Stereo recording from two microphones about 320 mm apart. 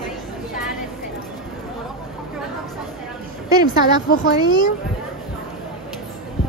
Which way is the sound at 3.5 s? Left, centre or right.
Centre.